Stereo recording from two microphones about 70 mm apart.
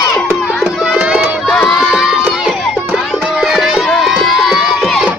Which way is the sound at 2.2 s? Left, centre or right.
Centre.